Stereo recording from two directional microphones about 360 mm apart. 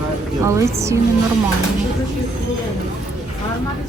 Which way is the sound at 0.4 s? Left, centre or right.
Centre.